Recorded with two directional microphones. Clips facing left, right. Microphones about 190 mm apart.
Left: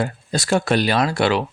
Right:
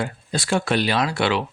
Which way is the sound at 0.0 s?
40° left (ahead or behind).